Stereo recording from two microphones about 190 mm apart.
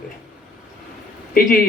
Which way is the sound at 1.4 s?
50° left (ahead or behind).